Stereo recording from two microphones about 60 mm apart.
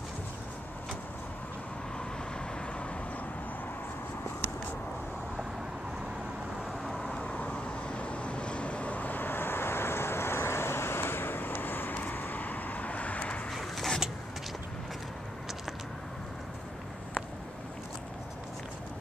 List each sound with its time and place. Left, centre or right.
6.8 s vehicle: centre
7.1 s vehicle: left
13.5 s a sound: centre